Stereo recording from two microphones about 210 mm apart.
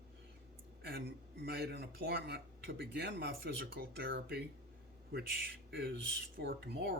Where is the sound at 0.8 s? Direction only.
50° right (ahead or behind).